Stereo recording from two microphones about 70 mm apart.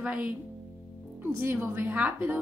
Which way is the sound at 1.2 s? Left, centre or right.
Right.